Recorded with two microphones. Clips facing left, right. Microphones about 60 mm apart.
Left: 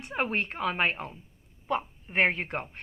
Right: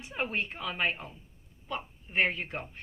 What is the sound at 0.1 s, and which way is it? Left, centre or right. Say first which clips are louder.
A woman's voice: left 4 dB; left.